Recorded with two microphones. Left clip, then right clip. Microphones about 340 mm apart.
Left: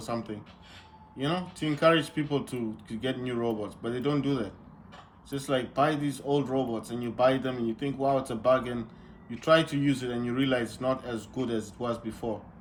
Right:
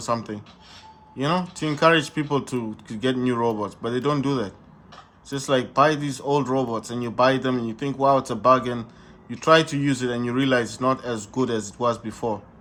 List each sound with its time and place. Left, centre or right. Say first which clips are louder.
0.0 s speech: right 8 dB; centre